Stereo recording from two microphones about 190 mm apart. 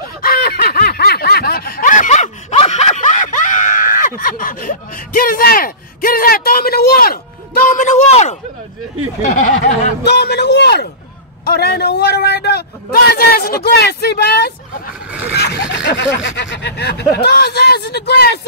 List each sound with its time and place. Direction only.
0.2 s snicker: 50° left (ahead or behind)
9.2 s speech: 45° left (ahead or behind)
10.0 s speech: 60° left (ahead or behind)